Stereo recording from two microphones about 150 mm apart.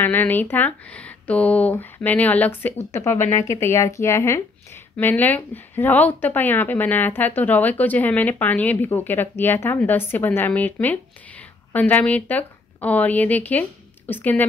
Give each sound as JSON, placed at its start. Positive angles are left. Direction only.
{"t": 0.0, "sound": "a woman's voice", "side_deg": 15}